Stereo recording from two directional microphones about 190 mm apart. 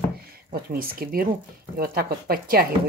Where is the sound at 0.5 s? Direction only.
50° right (ahead or behind).